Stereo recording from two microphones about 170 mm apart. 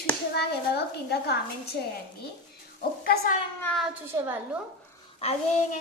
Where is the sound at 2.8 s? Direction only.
65° left (ahead or behind).